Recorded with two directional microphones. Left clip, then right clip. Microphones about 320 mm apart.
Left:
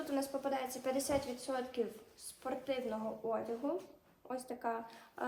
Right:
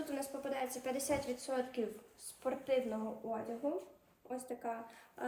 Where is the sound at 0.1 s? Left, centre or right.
Centre.